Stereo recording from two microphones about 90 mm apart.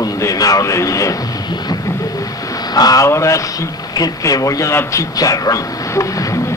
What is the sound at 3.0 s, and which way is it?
Speech, 35° left (ahead or behind).